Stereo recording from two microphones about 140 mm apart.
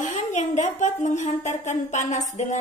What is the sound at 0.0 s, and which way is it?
A woman's voice, 60° left (ahead or behind).